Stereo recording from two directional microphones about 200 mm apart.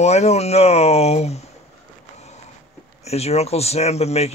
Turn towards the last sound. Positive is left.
turn(degrees=30)  # may be behind; listen again after turning